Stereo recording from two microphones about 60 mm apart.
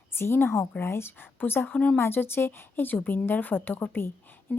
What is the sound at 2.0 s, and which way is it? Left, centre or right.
Speech, left.